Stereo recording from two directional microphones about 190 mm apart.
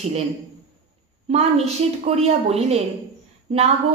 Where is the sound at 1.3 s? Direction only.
35° right (ahead or behind).